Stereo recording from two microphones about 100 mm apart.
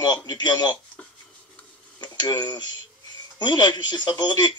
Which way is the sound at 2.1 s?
40° left (ahead or behind).